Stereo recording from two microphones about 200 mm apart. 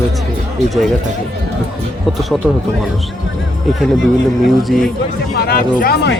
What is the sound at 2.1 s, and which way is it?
Speech, centre (ahead or behind).